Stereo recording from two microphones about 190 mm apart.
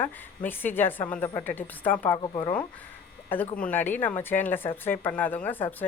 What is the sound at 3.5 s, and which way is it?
Speech, 10° left (ahead or behind).